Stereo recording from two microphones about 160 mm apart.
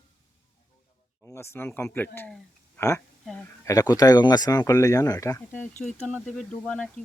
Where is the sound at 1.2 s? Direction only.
15° left (ahead or behind).